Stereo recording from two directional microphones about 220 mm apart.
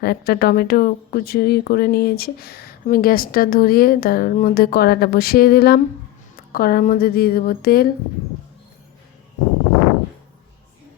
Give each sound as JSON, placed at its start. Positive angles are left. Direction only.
{"t": 0.0, "sound": "speech", "side_deg": 45}